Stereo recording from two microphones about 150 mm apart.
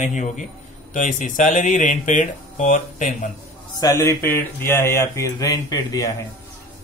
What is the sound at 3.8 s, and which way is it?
Speech, 20° left (ahead or behind).